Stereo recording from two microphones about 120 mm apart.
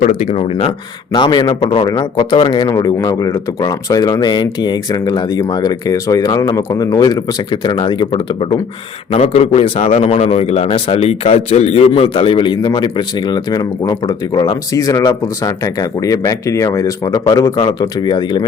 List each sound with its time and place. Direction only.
0.0 s speech: 90° left; by 0.7 s 60° left (ahead or behind)
1.1 s speech: 40° left (ahead or behind)
1.9 s speech: 35° left (ahead or behind)
2.3 s speech: 45° left (ahead or behind)